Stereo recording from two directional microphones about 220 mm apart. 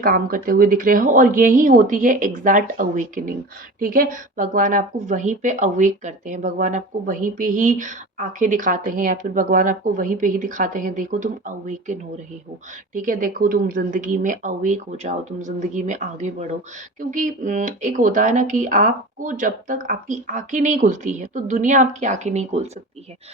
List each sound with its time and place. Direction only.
0.0 s speech: 40° right (ahead or behind)